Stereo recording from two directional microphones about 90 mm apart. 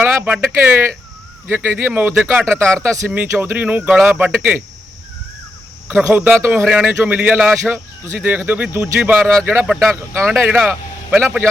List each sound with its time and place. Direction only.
0.0 s speech: 20° right (ahead or behind)
3.1 s speech: 15° right (ahead or behind)
5.9 s speech: 20° right (ahead or behind)
9.6 s speech: 10° right (ahead or behind)
9.9 s speech: 25° right (ahead or behind)